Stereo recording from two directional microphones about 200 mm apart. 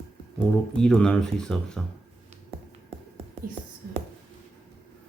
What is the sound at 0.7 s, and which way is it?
Speech, 5° left (ahead or behind).